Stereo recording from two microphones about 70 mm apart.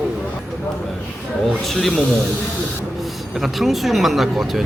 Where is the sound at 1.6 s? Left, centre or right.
Centre.